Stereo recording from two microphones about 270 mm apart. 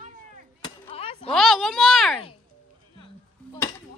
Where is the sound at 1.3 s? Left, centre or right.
Centre.